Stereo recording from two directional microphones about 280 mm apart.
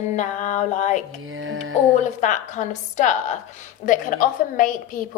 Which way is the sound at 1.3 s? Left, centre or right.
Right.